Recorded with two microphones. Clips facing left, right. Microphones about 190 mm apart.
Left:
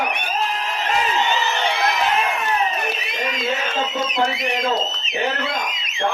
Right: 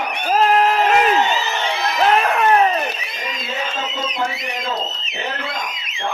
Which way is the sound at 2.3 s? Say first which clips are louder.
Right 8 dB; 65° right (ahead or behind).